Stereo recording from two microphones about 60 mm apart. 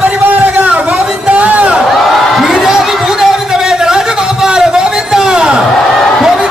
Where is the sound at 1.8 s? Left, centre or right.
Centre.